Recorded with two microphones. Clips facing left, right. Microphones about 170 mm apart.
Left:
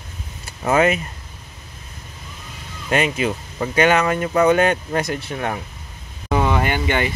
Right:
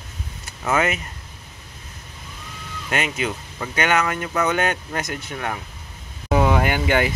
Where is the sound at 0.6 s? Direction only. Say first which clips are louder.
Left 5 dB; 30° left (ahead or behind).